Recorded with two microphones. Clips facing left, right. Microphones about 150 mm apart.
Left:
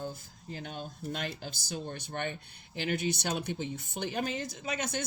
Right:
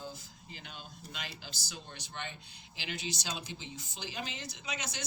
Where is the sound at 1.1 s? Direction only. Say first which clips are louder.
Left 7 dB; 50° left (ahead or behind).